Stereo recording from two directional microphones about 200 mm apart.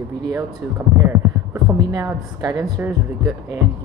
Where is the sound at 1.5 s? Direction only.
15° right (ahead or behind).